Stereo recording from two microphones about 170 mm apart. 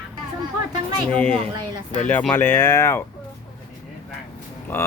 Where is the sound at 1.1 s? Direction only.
10° left (ahead or behind).